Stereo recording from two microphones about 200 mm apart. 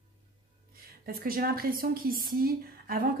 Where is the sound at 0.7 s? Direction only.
50° right (ahead or behind).